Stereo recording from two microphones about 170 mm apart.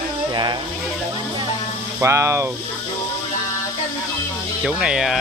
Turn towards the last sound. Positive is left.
turn(degrees=-5)  # may be behind; listen again after turning